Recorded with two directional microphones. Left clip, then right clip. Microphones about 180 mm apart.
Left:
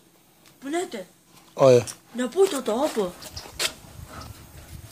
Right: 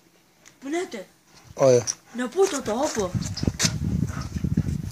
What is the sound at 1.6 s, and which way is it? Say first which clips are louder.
Speech: left 2 dB; centre (ahead or behind).